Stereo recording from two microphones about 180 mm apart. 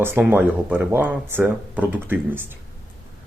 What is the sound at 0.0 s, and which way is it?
Speech, 10° right (ahead or behind).